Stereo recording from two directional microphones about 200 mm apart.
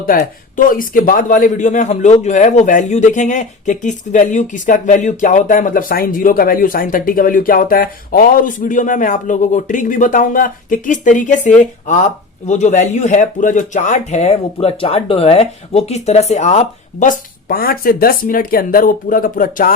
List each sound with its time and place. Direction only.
0.0 s speech: 45° left (ahead or behind)